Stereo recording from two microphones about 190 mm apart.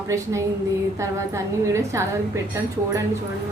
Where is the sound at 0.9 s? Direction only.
15° right (ahead or behind).